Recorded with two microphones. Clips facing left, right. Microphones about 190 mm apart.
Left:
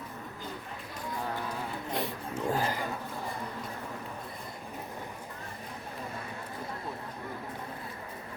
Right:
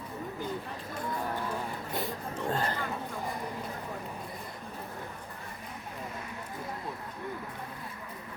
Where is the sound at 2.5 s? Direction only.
10° left (ahead or behind).